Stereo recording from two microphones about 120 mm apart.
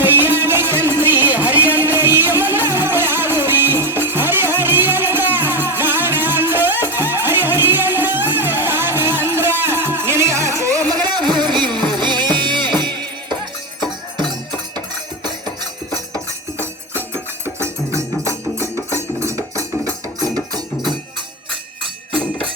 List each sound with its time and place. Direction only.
0.0 s music: 15° right (ahead or behind); by 13.1 s 40° right (ahead or behind)
16.1 s music: 20° right (ahead or behind)